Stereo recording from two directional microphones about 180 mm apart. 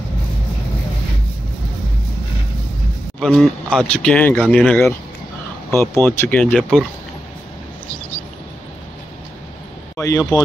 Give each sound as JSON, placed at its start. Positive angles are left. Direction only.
{"t": 3.2, "sound": "speech", "side_deg": 0}
{"t": 9.9, "sound": "speech", "side_deg": 15}